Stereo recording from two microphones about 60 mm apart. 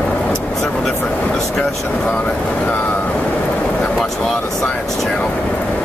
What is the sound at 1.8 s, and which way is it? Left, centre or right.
Speech, left.